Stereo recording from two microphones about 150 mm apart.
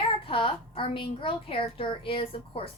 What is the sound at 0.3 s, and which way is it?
A woman's voice, 35° left (ahead or behind).